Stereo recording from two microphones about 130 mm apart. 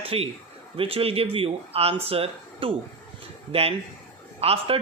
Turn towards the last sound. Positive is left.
turn(degrees=-50)  # may be behind; listen again after turning